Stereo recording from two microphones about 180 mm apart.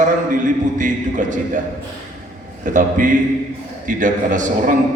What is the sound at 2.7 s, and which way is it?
A man's voice, 45° right (ahead or behind).